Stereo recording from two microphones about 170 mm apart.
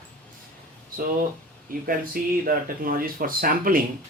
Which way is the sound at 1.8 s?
55° right (ahead or behind).